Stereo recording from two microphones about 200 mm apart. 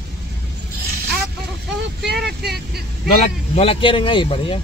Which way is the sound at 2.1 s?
55° right (ahead or behind).